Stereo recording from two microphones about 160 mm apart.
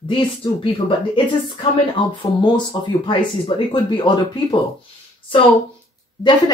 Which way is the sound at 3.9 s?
30° left (ahead or behind).